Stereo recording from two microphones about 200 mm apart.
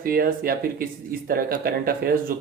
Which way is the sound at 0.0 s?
45° right (ahead or behind).